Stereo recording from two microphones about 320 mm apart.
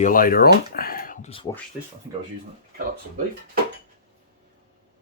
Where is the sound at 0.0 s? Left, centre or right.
Left.